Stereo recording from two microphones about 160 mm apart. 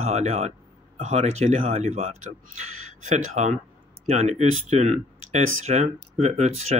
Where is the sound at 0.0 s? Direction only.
40° right (ahead or behind).